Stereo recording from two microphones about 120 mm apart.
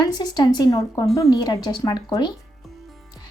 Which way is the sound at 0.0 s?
35° left (ahead or behind).